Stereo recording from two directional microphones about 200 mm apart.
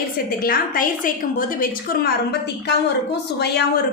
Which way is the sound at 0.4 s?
45° left (ahead or behind).